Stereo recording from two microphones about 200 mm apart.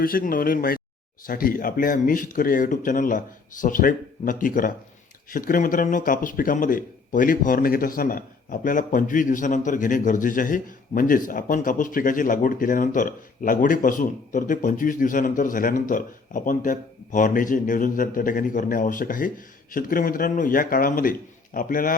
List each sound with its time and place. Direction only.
0.0 s speech: 45° left (ahead or behind)